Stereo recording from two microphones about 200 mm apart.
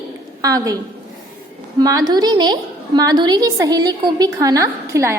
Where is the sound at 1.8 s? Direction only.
20° right (ahead or behind).